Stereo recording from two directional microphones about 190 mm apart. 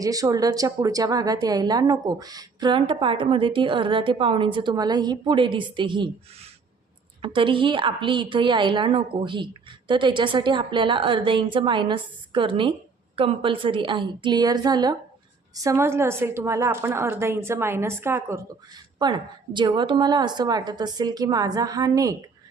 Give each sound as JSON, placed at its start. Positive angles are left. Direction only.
{"t": 0.0, "sound": "a woman's voice", "side_deg": -20}
{"t": 7.2, "sound": "a woman's voice", "side_deg": -25}
{"t": 18.9, "sound": "a woman's voice", "side_deg": -25}